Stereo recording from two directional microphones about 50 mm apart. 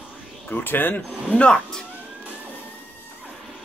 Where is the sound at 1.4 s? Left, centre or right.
Centre.